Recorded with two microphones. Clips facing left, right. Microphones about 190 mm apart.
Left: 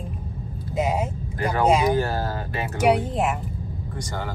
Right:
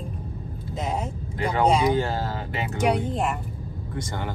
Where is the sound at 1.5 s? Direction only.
25° right (ahead or behind).